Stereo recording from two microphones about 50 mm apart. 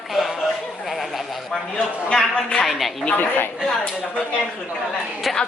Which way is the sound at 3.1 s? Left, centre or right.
Left.